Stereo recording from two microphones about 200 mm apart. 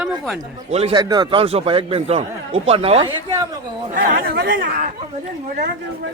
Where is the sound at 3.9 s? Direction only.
45° right (ahead or behind).